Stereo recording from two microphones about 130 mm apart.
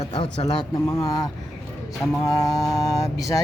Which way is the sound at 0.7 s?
20° left (ahead or behind).